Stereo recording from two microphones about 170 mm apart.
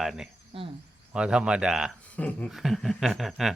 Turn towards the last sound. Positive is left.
turn(degrees=0)  # may be behind; listen again after turning